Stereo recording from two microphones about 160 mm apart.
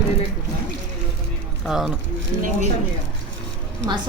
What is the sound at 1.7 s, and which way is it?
Speech, centre (ahead or behind).